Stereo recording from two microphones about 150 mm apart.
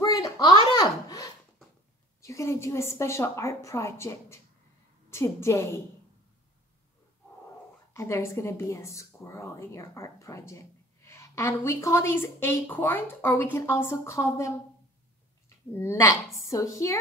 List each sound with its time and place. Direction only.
0.0 s a sound: 25° left (ahead or behind)
2.2 s speech: 20° left (ahead or behind)
7.9 s a woman's voice: 20° left (ahead or behind)
15.7 s a woman's voice: 15° left (ahead or behind)